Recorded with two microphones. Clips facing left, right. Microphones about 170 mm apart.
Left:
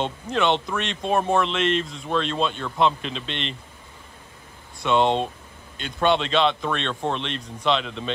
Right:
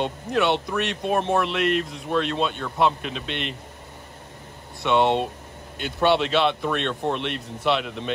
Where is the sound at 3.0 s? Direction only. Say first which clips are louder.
Even; 55° right (ahead or behind).